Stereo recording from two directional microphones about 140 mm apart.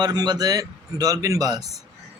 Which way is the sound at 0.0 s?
30° right (ahead or behind).